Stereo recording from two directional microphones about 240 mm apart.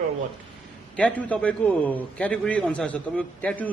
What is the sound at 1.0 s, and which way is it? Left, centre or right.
A man's voice, centre.